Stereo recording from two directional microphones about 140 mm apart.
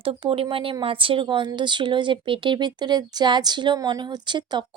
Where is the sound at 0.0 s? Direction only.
40° right (ahead or behind).